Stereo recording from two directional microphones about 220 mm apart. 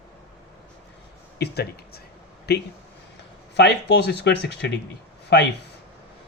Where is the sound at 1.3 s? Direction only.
50° left (ahead or behind).